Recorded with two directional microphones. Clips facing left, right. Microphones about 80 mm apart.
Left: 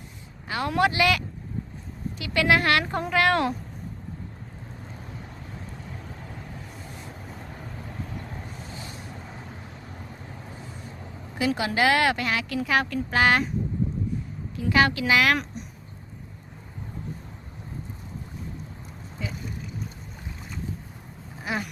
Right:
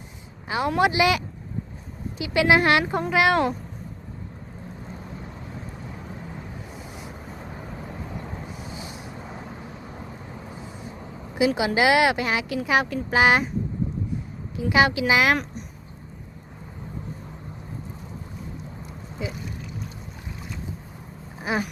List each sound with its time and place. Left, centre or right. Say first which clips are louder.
0.4 s a sound: right 4 dB; centre
0.8 s speech: right 1 dB; centre
2.8 s speech: right 2 dB; centre
6.7 s vehicle: right 2 dB; centre
11.3 s speech: right 3 dB; centre
14.5 s speech: right 2 dB; centre
19.2 s speech: right 3 dB; centre
21.3 s a sound: right 4 dB; right